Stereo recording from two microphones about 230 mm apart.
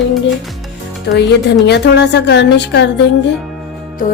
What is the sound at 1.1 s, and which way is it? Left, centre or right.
A woman's voice, left.